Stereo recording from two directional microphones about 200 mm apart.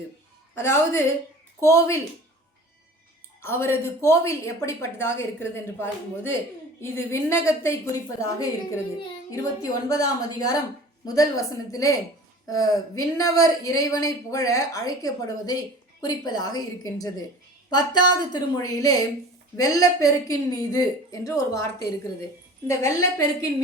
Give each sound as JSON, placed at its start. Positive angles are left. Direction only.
{"t": 0.5, "sound": "speech", "side_deg": 15}
{"t": 3.4, "sound": "a woman's voice", "side_deg": 10}